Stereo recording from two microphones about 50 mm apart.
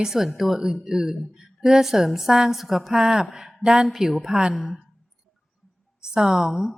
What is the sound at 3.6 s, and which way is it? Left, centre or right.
Speech, centre.